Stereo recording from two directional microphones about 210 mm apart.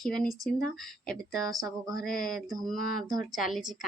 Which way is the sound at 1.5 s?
15° right (ahead or behind).